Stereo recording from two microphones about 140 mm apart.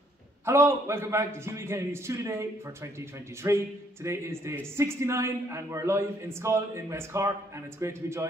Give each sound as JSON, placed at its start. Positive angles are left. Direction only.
{"t": 0.5, "sound": "a man's voice", "side_deg": -20}